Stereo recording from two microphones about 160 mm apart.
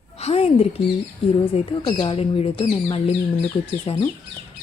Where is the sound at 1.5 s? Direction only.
40° left (ahead or behind).